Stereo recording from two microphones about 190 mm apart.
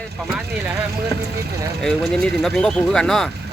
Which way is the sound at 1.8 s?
5° left (ahead or behind).